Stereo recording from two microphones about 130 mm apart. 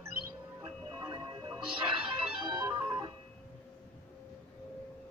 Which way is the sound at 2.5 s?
40° right (ahead or behind).